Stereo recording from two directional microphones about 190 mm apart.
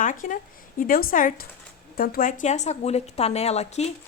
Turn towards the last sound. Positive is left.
turn(degrees=35)  # may be behind; listen again after turning